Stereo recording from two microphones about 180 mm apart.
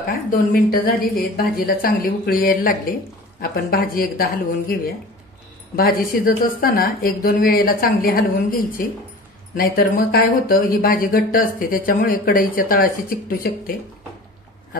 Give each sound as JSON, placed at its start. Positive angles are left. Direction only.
{"t": 0.3, "sound": "speech", "side_deg": 50}